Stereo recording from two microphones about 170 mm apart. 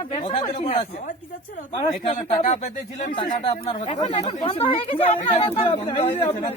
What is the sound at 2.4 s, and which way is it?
Speech, 45° left (ahead or behind).